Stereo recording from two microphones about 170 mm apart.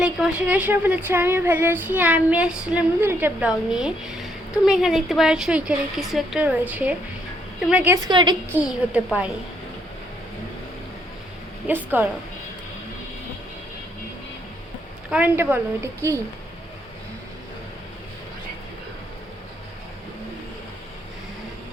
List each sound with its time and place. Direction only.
0.0 s speech: 5° right (ahead or behind)
8.0 s a woman's voice: 25° right (ahead or behind)
8.5 s speech: 5° right (ahead or behind)
11.7 s speech: 10° right (ahead or behind)
15.1 s speech: 10° right (ahead or behind)